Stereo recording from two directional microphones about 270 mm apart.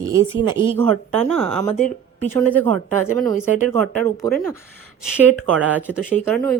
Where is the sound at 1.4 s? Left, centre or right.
Centre.